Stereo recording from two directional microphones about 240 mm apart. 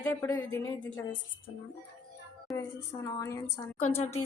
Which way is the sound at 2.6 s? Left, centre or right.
Centre.